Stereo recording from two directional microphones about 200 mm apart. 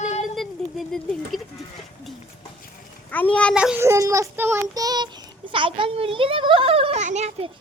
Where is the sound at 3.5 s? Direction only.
5° right (ahead or behind).